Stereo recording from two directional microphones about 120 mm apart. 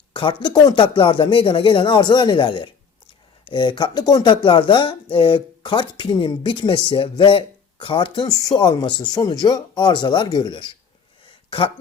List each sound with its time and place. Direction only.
0.1 s speech: 45° left (ahead or behind)